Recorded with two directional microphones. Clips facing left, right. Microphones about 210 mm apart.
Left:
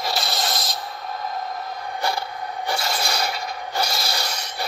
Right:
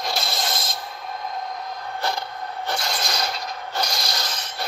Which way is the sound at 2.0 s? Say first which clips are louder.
Left 2 dB; 10° left (ahead or behind).